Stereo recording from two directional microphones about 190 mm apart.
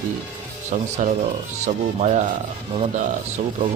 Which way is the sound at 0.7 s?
35° right (ahead or behind).